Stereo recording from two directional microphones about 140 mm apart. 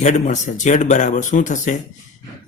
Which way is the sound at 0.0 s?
60° left (ahead or behind).